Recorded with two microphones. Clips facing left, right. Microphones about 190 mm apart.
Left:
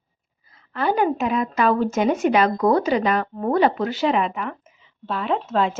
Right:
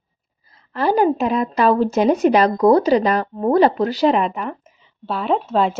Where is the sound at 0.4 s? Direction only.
35° right (ahead or behind).